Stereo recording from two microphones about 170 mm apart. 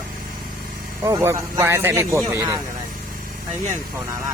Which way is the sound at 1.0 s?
15° right (ahead or behind).